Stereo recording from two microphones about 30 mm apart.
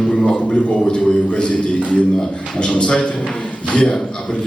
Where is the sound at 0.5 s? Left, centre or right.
Left.